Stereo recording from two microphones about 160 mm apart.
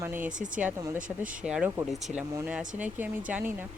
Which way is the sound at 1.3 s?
5° right (ahead or behind).